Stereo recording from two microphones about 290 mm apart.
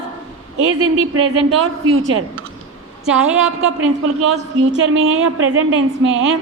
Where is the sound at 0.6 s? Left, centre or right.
Right.